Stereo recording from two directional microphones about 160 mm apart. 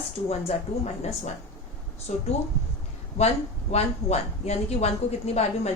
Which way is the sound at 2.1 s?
45° left (ahead or behind).